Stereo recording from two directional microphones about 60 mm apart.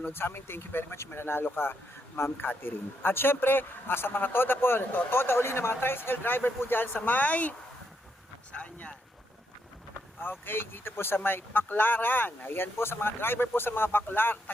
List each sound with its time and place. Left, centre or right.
0.0 s speech: left
8.5 s speech: left
10.2 s speech: left